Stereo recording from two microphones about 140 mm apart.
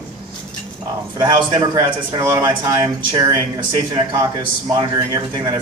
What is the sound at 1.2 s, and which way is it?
Speech, 30° right (ahead or behind).